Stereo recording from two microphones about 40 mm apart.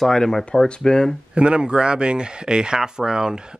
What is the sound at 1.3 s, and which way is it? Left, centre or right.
Speech, right.